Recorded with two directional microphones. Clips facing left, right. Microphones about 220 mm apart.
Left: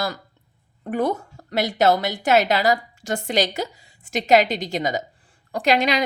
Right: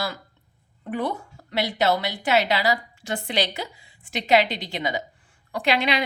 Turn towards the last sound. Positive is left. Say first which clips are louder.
# left 3 dB
turn(degrees=40)  # may be behind; listen again after turning